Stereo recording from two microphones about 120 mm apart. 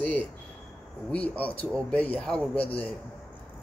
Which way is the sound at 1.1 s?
10° left (ahead or behind).